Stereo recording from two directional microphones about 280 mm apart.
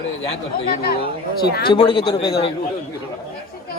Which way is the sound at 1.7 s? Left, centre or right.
Centre.